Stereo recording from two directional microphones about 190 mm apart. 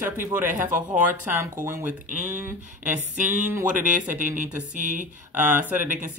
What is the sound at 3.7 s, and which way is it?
Speech, 45° right (ahead or behind).